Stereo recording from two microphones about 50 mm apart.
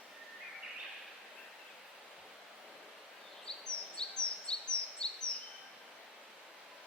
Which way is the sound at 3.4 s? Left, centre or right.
Centre.